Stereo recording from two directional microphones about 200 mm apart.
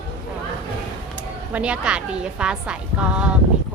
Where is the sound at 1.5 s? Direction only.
5° right (ahead or behind).